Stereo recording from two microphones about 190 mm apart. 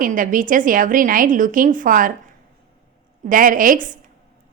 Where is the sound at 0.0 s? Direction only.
45° right (ahead or behind).